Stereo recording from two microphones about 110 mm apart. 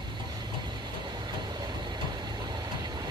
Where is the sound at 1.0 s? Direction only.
40° right (ahead or behind).